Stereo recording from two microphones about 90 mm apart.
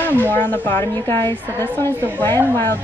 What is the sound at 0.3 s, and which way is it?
Speech, 20° left (ahead or behind).